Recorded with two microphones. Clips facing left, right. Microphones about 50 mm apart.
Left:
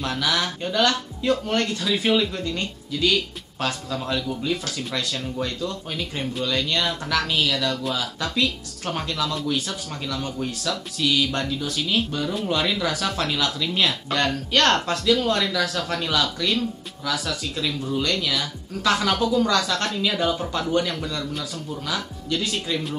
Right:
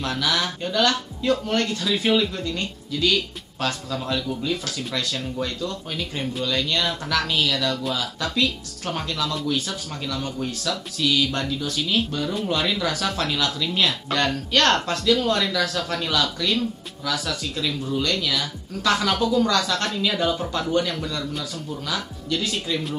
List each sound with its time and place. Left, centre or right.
0.0 s speech: centre
3.0 s speech: centre